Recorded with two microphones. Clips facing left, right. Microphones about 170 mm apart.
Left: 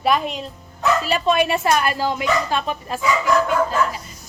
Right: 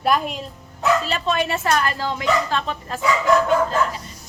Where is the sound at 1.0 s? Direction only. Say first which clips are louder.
Left 4 dB; 15° left (ahead or behind).